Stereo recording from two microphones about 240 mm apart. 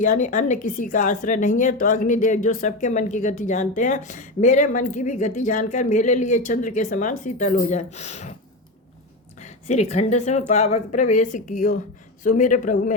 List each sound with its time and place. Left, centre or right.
0.0 s a woman's voice: left
9.4 s a woman's voice: left